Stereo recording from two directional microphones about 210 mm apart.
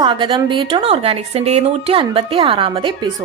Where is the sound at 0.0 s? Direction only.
20° right (ahead or behind).